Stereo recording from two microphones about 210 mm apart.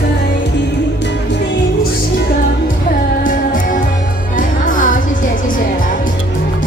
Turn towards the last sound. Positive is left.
turn(degrees=40)  # may be behind; listen again after turning